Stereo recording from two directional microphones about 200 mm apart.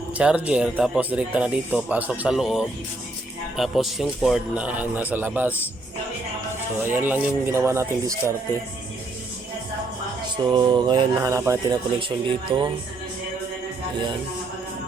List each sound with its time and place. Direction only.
0.2 s a man's voice: 5° right (ahead or behind)
6.8 s a man's voice: 10° right (ahead or behind)
10.3 s speech: 20° right (ahead or behind)
11.9 s speech: 25° right (ahead or behind)